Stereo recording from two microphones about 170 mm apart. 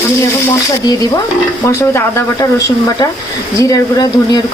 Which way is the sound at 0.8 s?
25° left (ahead or behind).